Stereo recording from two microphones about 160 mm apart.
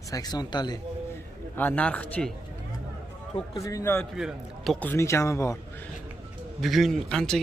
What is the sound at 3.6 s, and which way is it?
Speech, 15° left (ahead or behind).